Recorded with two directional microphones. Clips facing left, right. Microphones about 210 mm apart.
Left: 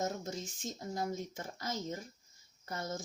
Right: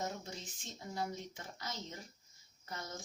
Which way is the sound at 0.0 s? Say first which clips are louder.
Left 5 dB; 45° left (ahead or behind).